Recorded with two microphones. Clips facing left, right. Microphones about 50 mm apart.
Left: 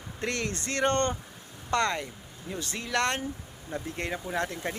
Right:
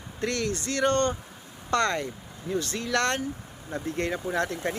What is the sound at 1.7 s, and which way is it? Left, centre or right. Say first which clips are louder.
Speech: right 2 dB; centre.